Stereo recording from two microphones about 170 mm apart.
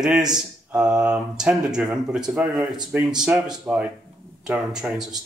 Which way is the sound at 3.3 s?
5° right (ahead or behind).